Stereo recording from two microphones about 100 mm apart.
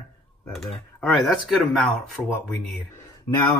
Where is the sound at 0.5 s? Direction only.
Centre (ahead or behind).